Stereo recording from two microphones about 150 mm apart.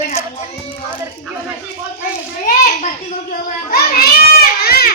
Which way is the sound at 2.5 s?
60° left (ahead or behind).